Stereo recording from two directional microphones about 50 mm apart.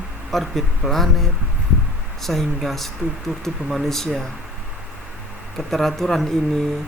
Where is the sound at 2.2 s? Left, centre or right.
Centre.